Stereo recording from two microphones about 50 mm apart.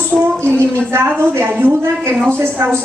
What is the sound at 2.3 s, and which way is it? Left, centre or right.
Speech, right.